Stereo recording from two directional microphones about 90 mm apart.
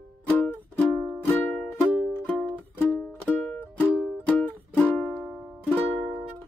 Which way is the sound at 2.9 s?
15° left (ahead or behind).